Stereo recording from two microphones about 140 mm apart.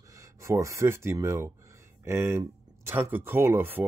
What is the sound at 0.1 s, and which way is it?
Speech, 20° right (ahead or behind).